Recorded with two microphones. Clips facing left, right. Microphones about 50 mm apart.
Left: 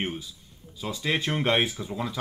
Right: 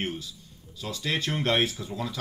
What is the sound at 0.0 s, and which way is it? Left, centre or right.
Speech, centre.